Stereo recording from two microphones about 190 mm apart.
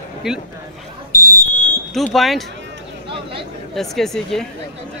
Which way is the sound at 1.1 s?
50° left (ahead or behind).